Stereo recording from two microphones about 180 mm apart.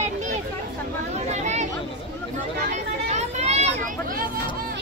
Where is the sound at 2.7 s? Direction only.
40° right (ahead or behind).